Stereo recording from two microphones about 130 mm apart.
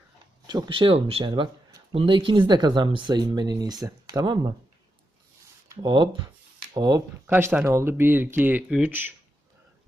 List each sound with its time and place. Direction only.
0.4 s speech: 30° right (ahead or behind); by 1.2 s 50° right (ahead or behind)
1.2 s speech: 35° right (ahead or behind)
5.6 s speech: 35° right (ahead or behind)
7.3 s speech: 15° right (ahead or behind)